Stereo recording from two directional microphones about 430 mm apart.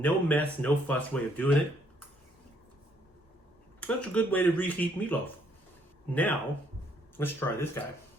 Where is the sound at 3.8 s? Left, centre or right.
Centre.